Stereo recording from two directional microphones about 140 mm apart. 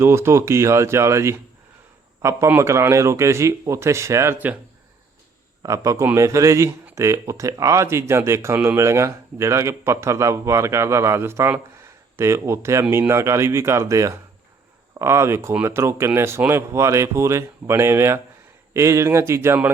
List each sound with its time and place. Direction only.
0.0 s speech: 20° right (ahead or behind)
5.6 s speech: 25° right (ahead or behind)